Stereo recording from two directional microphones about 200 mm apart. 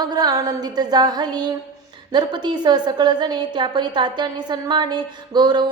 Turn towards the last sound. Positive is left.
turn(degrees=-20)  # may be behind; listen again after turning